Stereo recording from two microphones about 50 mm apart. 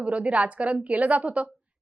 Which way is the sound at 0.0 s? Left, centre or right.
Right.